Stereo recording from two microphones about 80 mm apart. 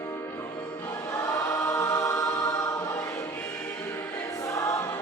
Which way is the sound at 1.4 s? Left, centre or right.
Left.